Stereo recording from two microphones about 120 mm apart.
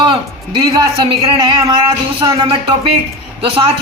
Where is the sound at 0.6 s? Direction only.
40° right (ahead or behind).